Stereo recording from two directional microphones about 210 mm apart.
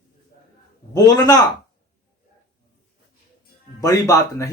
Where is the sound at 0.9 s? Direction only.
20° left (ahead or behind).